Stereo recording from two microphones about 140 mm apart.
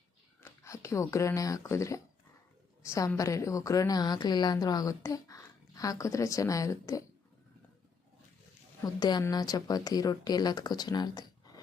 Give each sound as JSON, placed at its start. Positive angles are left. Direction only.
{"t": 0.4, "sound": "speech", "side_deg": 20}
{"t": 8.8, "sound": "speech", "side_deg": 30}